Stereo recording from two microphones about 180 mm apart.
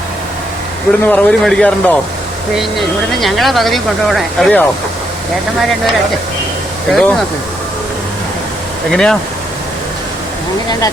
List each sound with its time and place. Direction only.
1.1 s speech: centre (ahead or behind)
6.9 s speech: 5° left (ahead or behind)
8.9 s speech: 5° left (ahead or behind)